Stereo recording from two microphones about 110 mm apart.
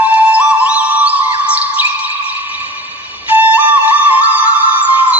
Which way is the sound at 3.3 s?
15° right (ahead or behind).